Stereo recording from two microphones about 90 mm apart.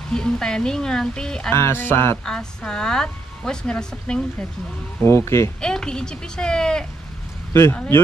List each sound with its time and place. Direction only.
0.1 s speech: 5° left (ahead or behind)
1.5 s music: 30° left (ahead or behind)
2.2 s speech: 5° left (ahead or behind)
5.0 s speech: 30° left (ahead or behind)
5.6 s speech: 10° left (ahead or behind)